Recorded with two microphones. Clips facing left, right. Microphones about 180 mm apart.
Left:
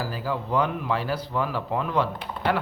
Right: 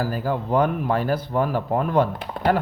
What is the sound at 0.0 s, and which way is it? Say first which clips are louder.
Speech: right 5 dB; 50° right (ahead or behind).